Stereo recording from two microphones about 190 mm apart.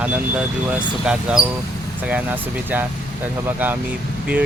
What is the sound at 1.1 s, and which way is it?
Speech, 5° right (ahead or behind).